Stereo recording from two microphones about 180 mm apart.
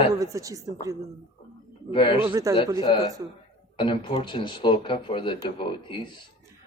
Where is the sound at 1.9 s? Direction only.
25° left (ahead or behind).